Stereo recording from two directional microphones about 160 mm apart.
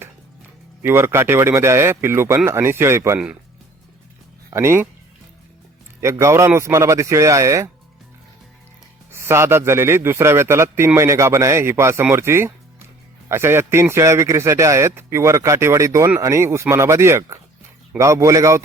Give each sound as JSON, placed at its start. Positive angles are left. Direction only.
{"t": 0.8, "sound": "a man's voice", "side_deg": -15}
{"t": 4.5, "sound": "a man's voice", "side_deg": -15}
{"t": 6.0, "sound": "speech", "side_deg": -15}
{"t": 9.1, "sound": "a man's voice", "side_deg": -15}